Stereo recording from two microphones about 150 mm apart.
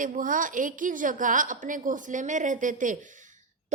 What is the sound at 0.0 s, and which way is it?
A woman's voice, 60° right (ahead or behind).